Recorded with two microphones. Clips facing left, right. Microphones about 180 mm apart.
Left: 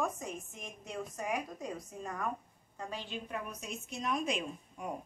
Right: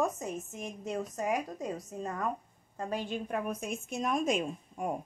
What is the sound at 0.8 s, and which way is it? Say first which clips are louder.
A woman's voice: right 5 dB; 40° right (ahead or behind).